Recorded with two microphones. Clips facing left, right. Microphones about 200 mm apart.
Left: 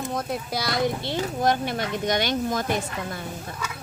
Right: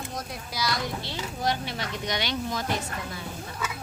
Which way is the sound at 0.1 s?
55° left (ahead or behind).